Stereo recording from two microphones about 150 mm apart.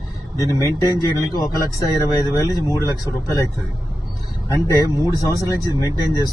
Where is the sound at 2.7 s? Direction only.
20° right (ahead or behind).